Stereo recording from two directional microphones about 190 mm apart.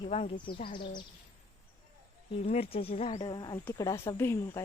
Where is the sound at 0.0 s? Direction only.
30° left (ahead or behind).